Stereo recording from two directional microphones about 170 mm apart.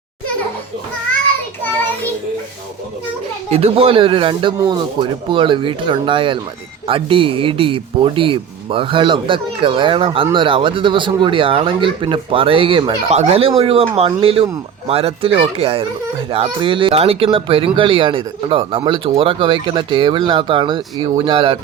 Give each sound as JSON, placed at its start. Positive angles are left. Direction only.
{"t": 3.5, "sound": "speech", "side_deg": -35}